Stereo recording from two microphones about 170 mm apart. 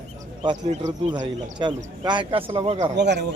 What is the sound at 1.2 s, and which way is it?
Speech, 25° right (ahead or behind).